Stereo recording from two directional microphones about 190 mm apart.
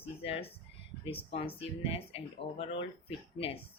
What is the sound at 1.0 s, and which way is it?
Speech, 30° left (ahead or behind).